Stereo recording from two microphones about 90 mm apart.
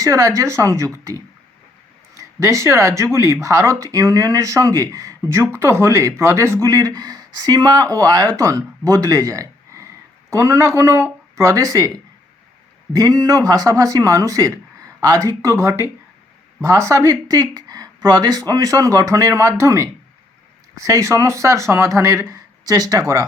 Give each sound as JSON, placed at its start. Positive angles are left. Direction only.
{"t": 0.0, "sound": "speech", "side_deg": -35}
{"t": 6.7, "sound": "speech", "side_deg": -40}
{"t": 12.9, "sound": "speech", "side_deg": -45}